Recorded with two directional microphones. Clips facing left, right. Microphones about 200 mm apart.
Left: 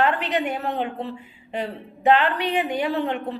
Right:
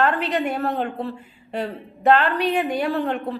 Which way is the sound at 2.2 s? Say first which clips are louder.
Right 2 dB; 45° right (ahead or behind).